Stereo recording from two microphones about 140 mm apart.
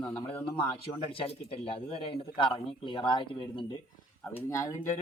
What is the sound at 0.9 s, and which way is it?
A man's voice, 40° left (ahead or behind).